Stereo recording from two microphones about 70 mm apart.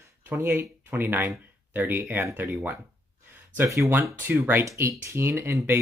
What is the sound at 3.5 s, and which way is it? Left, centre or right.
Speech, right.